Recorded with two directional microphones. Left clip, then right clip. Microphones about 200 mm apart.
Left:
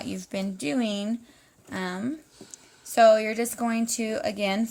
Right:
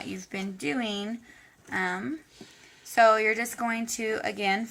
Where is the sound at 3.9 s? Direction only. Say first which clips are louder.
Left 1 dB; 45° left (ahead or behind).